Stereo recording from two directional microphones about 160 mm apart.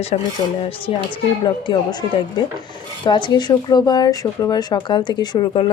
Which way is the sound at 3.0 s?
30° left (ahead or behind).